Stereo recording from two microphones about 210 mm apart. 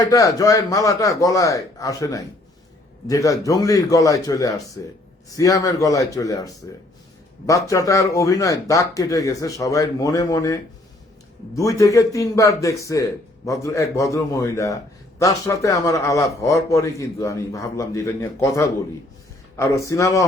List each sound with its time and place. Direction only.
0.0 s a man's voice: 15° left (ahead or behind)